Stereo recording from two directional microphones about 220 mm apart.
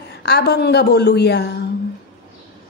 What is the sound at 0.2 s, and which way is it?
Music, 50° left (ahead or behind).